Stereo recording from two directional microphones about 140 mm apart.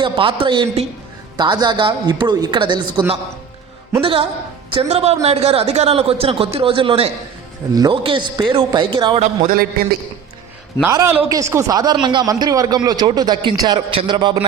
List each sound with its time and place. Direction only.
0.0 s a man's voice: 35° right (ahead or behind)
4.0 s a man's voice: 40° right (ahead or behind)
9.1 s a man's voice: 55° right (ahead or behind)
10.8 s a man's voice: 20° right (ahead or behind); by 14.4 s 35° right (ahead or behind)